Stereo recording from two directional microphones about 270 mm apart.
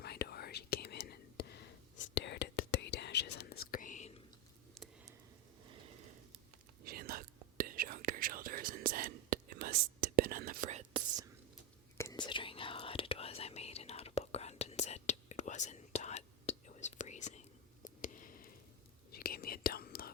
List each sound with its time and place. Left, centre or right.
0.0 s whispering: left
6.8 s whispering: right
11.9 s whispering: centre
17.8 s a sound: left
19.1 s whispering: left